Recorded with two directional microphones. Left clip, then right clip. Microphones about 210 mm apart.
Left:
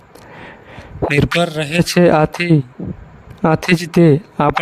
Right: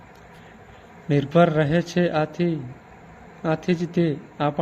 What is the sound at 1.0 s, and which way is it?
Speech, 50° left (ahead or behind).